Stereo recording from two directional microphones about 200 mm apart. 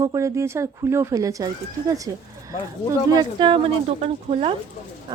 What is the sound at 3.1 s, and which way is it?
Speech, 20° right (ahead or behind).